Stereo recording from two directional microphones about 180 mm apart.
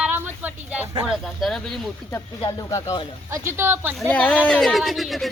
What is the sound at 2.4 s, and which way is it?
Speech, 20° left (ahead or behind).